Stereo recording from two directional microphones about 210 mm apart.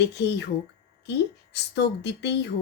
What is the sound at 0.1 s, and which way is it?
Speech, 55° left (ahead or behind).